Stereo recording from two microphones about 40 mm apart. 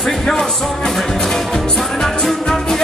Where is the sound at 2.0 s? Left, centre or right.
Centre.